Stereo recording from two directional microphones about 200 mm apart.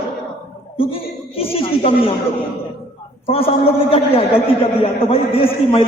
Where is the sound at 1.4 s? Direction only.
30° left (ahead or behind).